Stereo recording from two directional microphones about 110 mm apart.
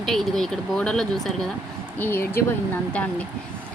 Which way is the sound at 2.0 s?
20° left (ahead or behind).